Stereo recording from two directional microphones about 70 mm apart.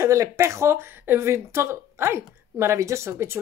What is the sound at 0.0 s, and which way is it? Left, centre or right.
Speech, right.